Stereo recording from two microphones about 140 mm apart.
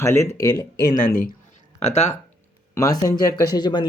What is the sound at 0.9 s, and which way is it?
Speech, 85° left.